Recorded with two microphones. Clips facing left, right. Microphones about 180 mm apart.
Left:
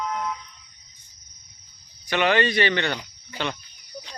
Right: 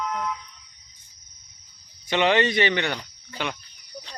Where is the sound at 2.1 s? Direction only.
20° right (ahead or behind).